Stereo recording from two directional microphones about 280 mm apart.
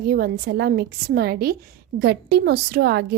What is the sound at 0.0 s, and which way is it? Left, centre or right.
A woman's voice, right.